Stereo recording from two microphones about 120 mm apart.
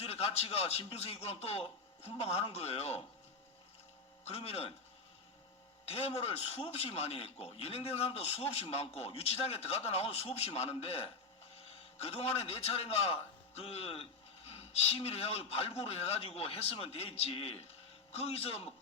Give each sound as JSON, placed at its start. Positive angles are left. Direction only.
{"t": 0.0, "sound": "a man's voice", "side_deg": 55}
{"t": 4.3, "sound": "speech", "side_deg": 55}
{"t": 5.8, "sound": "a man's voice", "side_deg": 55}